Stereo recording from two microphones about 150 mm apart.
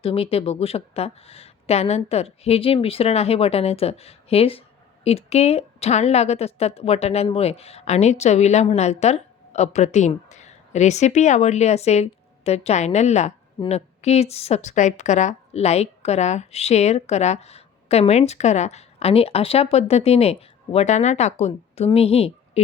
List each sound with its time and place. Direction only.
0.0 s a woman's voice: 40° left (ahead or behind)